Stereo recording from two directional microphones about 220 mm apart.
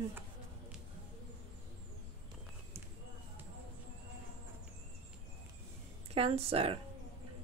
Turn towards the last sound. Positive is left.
turn(degrees=-25)  # may be behind; listen again after turning